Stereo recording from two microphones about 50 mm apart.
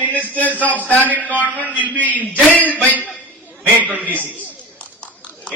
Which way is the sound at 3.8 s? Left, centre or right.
Right.